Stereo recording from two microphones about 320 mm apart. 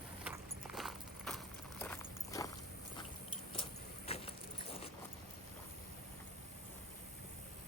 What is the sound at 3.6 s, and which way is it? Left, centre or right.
Vehicle, centre.